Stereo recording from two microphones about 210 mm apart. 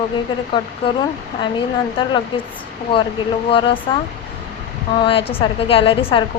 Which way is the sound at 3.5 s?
25° left (ahead or behind).